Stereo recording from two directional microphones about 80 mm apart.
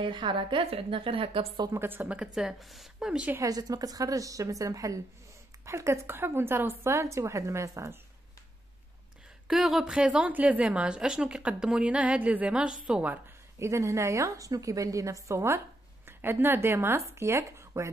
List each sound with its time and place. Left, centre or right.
0.0 s a woman's voice: right
1.7 s a woman's voice: right; by 3.3 s centre
3.3 s a woman's voice: right
9.5 s speech: centre
9.9 s a woman's voice: centre
13.6 s a woman's voice: right